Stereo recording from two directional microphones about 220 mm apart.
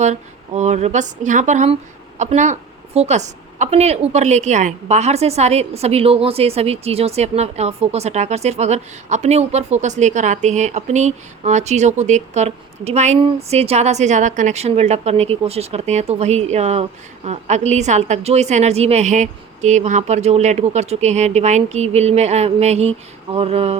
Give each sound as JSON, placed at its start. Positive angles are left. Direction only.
{"t": 0.0, "sound": "speech", "side_deg": -30}